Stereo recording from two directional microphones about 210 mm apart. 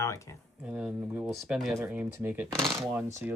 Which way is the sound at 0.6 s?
5° right (ahead or behind).